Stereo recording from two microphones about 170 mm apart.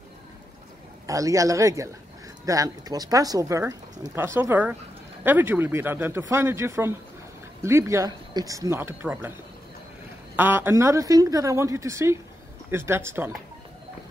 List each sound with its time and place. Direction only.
1.0 s a woman's voice: 20° right (ahead or behind)
10.3 s a woman's voice: 10° right (ahead or behind)